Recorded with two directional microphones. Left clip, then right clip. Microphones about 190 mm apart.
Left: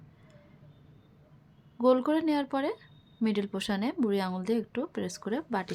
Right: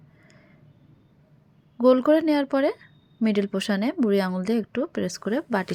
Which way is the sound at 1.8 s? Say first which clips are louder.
Right 7 dB; 25° right (ahead or behind).